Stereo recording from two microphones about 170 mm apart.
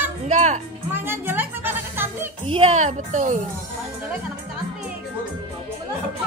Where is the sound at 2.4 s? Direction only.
35° right (ahead or behind).